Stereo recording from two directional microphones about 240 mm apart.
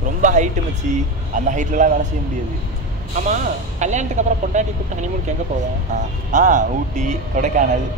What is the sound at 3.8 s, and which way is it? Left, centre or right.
Speech, right.